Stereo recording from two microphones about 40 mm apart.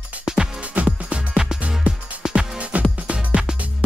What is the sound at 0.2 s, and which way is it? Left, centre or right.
Music, centre.